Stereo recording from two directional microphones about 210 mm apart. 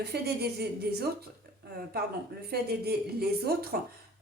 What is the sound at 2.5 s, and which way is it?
A woman's voice, 50° right (ahead or behind).